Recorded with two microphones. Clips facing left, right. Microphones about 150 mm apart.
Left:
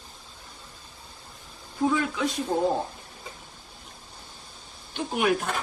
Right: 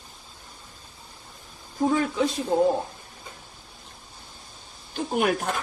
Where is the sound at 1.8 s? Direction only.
40° right (ahead or behind).